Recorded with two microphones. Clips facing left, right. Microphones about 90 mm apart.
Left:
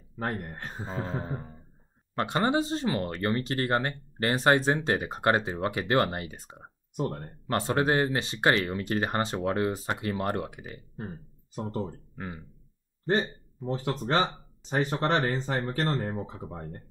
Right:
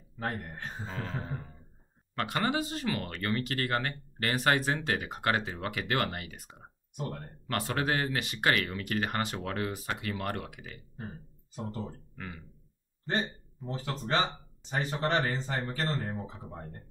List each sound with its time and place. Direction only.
0.2 s speech: 45° left (ahead or behind)
1.0 s speech: 25° left (ahead or behind)
7.0 s speech: 45° left (ahead or behind)
7.4 s speech: 30° left (ahead or behind)
11.5 s speech: 45° left (ahead or behind)
12.2 s speech: 30° left (ahead or behind)
13.0 s speech: 45° left (ahead or behind)